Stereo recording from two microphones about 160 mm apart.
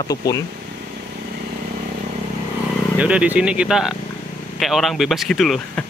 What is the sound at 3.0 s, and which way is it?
Speech, 10° right (ahead or behind).